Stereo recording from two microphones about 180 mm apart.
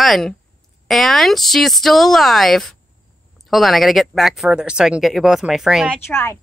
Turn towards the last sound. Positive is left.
turn(degrees=15)  # may be behind; listen again after turning